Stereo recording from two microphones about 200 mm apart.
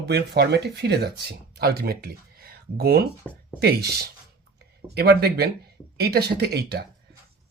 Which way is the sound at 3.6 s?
50° right (ahead or behind).